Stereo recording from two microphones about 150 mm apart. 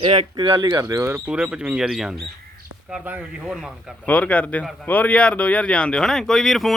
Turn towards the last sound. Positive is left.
turn(degrees=0)  # may be behind; listen again after turning